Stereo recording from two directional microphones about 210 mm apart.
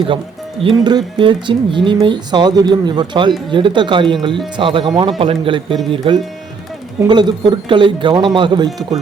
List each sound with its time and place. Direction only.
0.6 s speech: 25° right (ahead or behind)